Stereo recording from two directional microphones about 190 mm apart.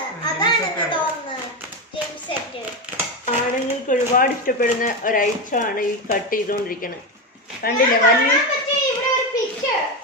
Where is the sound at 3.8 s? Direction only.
45° left (ahead or behind).